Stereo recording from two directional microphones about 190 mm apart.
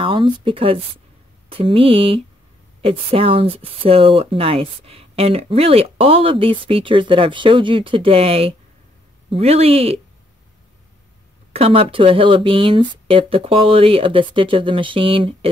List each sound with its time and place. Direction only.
0.0 s speech: 25° right (ahead or behind)
11.5 s speech: 30° right (ahead or behind)